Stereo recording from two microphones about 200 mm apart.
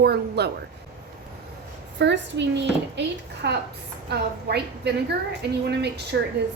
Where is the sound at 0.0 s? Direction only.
55° right (ahead or behind).